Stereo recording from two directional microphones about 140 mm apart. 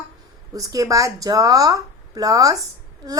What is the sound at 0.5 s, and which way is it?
A woman's voice, 25° right (ahead or behind).